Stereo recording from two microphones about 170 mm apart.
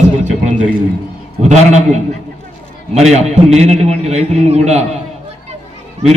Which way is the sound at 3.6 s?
40° right (ahead or behind).